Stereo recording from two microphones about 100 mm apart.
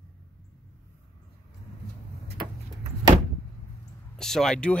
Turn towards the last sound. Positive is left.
turn(degrees=5)  # may be behind; listen again after turning